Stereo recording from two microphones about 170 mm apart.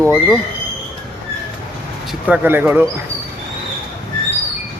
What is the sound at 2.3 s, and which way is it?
Speech, 10° right (ahead or behind).